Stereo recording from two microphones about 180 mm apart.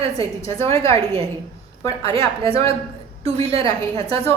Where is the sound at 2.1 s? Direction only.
30° right (ahead or behind).